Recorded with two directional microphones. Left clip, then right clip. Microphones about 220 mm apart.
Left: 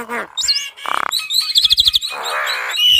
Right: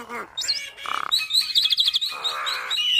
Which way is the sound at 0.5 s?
40° left (ahead or behind).